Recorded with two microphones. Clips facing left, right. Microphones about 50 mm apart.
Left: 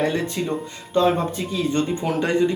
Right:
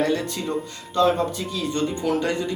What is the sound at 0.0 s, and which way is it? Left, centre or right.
Speech, left.